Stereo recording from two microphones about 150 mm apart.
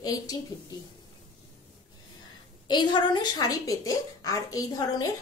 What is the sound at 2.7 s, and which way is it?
A woman's voice, 30° left (ahead or behind).